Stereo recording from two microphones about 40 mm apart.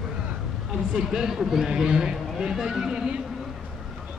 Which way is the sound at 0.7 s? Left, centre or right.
Centre.